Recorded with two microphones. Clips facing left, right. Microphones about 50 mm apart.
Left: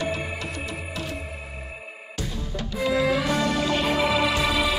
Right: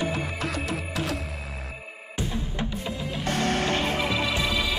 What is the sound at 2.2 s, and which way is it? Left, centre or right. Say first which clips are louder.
Music: right 2 dB; right.